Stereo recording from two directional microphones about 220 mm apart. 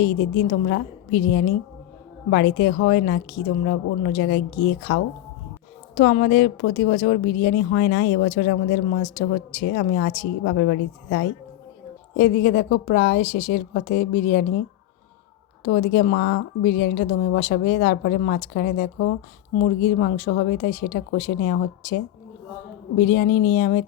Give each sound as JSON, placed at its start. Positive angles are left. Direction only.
{"t": 0.0, "sound": "a woman's voice", "side_deg": 45}
{"t": 15.6, "sound": "speech", "side_deg": 45}